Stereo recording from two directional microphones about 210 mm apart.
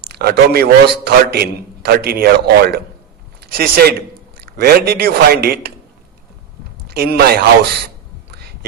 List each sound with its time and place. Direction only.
0.1 s a man's voice: 45° right (ahead or behind)
6.8 s a man's voice: 50° right (ahead or behind)
8.3 s whispering: 50° right (ahead or behind)